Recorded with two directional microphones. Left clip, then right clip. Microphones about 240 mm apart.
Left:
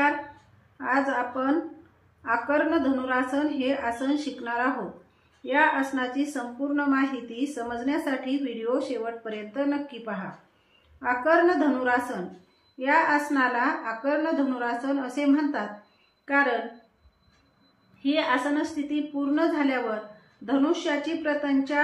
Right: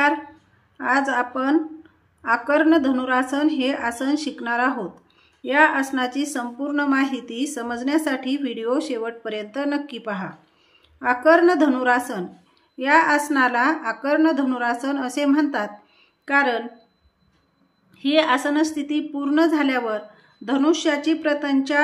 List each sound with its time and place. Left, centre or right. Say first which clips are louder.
0.7 s a woman's voice: right 5 dB; right
17.9 s a woman's voice: right 6 dB; right